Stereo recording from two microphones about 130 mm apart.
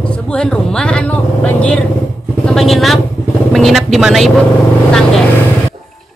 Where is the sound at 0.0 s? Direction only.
10° left (ahead or behind).